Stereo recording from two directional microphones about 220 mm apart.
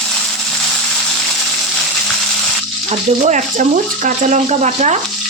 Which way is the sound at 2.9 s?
35° right (ahead or behind).